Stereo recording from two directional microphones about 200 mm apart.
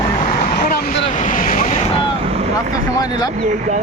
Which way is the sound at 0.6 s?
50° left (ahead or behind).